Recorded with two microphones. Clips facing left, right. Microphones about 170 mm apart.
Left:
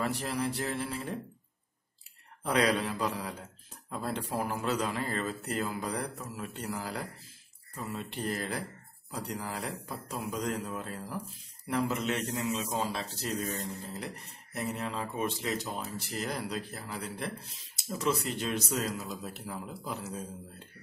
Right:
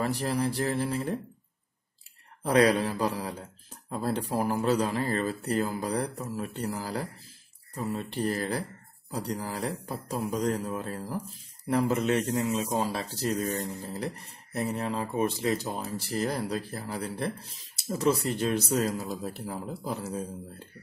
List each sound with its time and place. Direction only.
0.0 s speech: 40° right (ahead or behind)
2.4 s speech: 40° right (ahead or behind)